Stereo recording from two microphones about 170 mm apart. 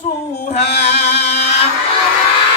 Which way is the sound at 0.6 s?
75° left (ahead or behind).